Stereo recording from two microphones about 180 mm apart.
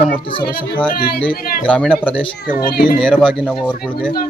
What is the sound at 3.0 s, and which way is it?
Speech, 5° left (ahead or behind).